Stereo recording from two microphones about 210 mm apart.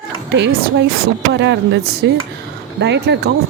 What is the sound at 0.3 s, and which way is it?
Speech, 50° right (ahead or behind).